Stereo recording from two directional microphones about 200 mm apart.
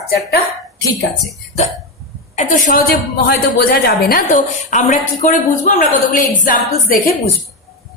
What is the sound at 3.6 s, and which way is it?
A woman's voice, 50° left (ahead or behind).